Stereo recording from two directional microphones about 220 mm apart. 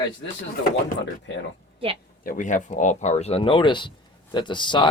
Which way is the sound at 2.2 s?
35° left (ahead or behind).